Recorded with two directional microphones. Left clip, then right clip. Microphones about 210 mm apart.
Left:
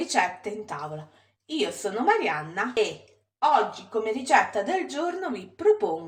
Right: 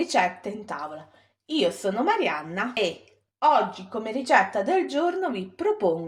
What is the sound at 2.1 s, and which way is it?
Speech, 40° right (ahead or behind).